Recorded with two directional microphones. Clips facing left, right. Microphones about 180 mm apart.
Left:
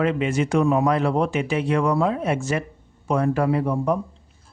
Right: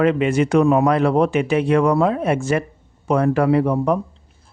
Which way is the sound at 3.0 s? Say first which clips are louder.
Right 4 dB; 70° right (ahead or behind).